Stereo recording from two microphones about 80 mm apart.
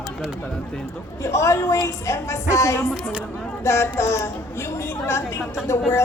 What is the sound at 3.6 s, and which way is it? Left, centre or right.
Speech, left.